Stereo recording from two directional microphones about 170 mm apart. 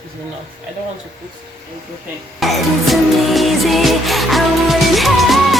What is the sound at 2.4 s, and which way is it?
Music, centre (ahead or behind).